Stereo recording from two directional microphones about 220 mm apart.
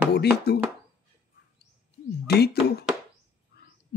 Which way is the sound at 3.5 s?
45° left (ahead or behind).